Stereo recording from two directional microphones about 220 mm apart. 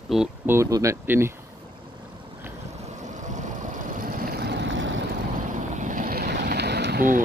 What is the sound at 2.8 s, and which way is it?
Boat, 30° right (ahead or behind).